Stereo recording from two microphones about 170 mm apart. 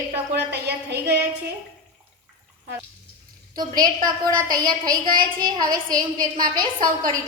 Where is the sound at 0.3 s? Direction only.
80° right.